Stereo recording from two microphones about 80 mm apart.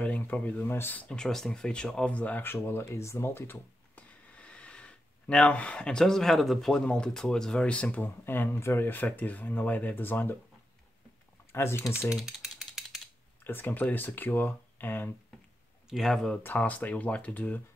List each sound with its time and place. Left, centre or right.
0.0 s speech: centre
1.0 s speech: centre; by 3.5 s left
3.9 s speech: centre
11.5 s speech: left
12.2 s mechanisms: centre
13.4 s speech: left
15.9 s speech: centre
16.4 s speech: centre